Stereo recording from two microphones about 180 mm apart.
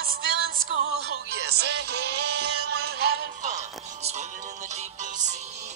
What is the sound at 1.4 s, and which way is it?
Music, 65° right (ahead or behind).